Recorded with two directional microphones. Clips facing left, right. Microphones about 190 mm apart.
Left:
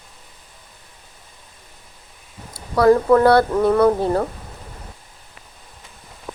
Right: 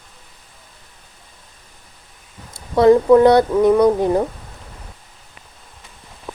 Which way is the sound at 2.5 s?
20° right (ahead or behind).